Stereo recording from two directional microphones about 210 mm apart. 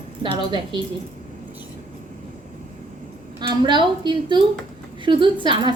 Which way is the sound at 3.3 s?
20° right (ahead or behind).